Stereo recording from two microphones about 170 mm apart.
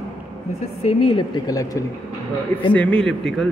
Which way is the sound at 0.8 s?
30° left (ahead or behind).